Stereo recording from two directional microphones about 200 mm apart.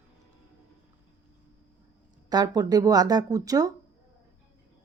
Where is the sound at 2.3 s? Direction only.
20° right (ahead or behind).